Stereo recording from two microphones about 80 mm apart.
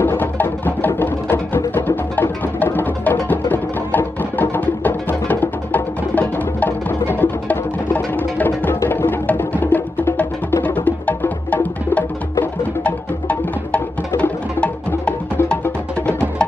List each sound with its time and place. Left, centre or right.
0.0 s music: left